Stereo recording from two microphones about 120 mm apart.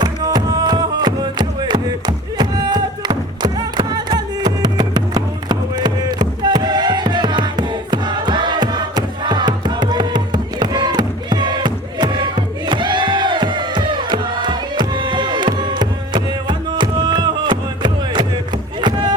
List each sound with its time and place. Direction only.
0.0 s music: 35° right (ahead or behind)
18.8 s chop: 40° right (ahead or behind)